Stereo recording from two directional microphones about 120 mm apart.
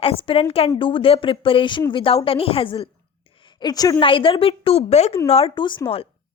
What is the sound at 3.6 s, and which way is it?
Speech, 35° left (ahead or behind).